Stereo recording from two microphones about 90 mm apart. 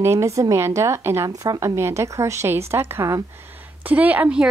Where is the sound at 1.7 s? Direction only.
30° right (ahead or behind).